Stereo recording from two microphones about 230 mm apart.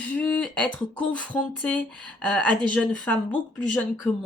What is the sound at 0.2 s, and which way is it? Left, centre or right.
Speech, centre.